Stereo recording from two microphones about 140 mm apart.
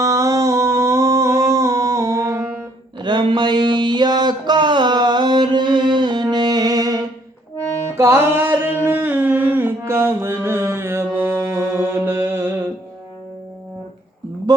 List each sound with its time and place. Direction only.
0.0 s humming: 25° right (ahead or behind)
3.0 s a sound: 35° right (ahead or behind)
7.9 s music: 15° right (ahead or behind)